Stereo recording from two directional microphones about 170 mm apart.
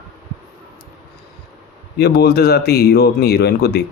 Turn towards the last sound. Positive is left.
turn(degrees=70)  # may be behind; listen again after turning